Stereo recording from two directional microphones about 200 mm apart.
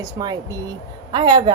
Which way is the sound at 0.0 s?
20° right (ahead or behind).